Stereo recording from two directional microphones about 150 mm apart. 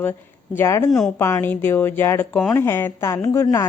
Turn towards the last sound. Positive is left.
turn(degrees=20)  # may be behind; listen again after turning